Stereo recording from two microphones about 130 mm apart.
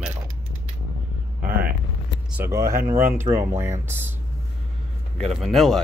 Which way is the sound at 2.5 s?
25° right (ahead or behind).